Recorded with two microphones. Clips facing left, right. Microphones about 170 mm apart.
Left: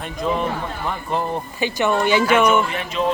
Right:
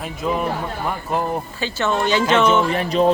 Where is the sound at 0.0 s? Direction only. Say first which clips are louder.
Even; 5° right (ahead or behind).